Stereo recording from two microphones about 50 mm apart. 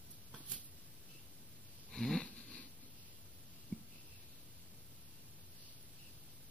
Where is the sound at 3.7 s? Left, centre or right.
Centre.